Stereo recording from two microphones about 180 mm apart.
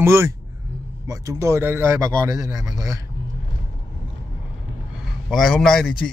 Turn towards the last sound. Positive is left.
turn(degrees=5)  # may be behind; listen again after turning